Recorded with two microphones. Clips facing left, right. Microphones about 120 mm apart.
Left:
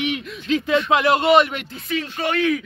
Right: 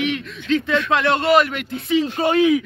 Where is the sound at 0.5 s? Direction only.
20° left (ahead or behind).